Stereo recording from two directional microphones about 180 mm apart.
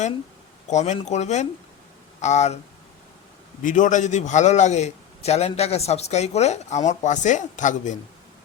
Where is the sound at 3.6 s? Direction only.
45° left (ahead or behind).